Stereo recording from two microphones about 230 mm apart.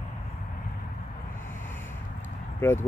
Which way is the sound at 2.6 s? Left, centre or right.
Centre.